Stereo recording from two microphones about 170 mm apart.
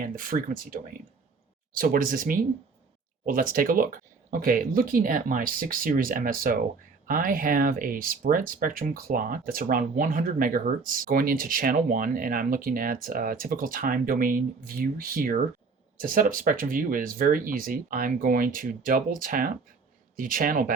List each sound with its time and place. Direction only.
0.0 s speech: 55° right (ahead or behind)